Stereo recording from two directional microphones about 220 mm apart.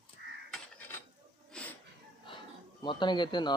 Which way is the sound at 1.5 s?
5° left (ahead or behind).